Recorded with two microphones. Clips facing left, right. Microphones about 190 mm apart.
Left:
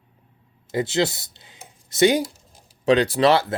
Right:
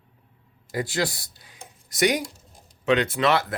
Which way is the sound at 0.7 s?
25° left (ahead or behind).